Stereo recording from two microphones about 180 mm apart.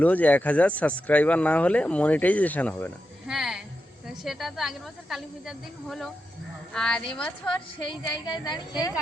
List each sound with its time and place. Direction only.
0.0 s a woman's voice: 10° left (ahead or behind)
7.9 s speech: 25° left (ahead or behind)